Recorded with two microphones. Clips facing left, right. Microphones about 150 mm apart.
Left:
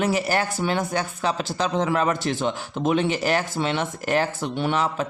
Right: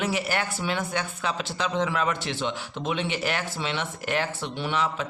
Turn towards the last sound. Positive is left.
turn(degrees=45)  # may be behind; listen again after turning